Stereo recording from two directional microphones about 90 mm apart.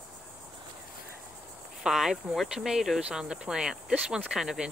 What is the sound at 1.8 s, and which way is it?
Speech, 5° right (ahead or behind).